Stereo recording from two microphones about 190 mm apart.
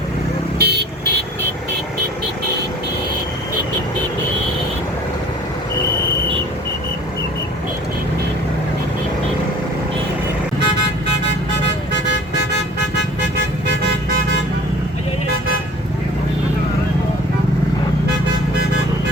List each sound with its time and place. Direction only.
0.6 s vehicle: 60° right (ahead or behind)